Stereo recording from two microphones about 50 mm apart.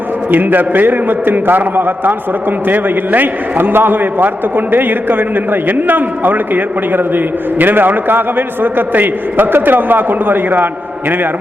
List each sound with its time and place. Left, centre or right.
0.3 s a man's voice: right